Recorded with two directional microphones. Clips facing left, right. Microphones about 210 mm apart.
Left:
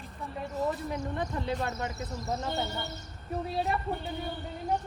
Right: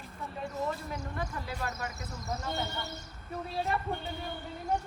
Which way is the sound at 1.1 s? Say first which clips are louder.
Left 6 dB; 20° left (ahead or behind).